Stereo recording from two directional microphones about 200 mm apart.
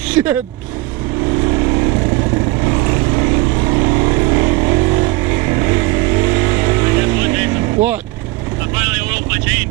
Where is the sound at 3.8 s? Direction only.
15° right (ahead or behind).